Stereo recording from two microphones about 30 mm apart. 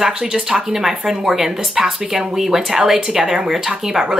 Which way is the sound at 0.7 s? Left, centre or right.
Centre.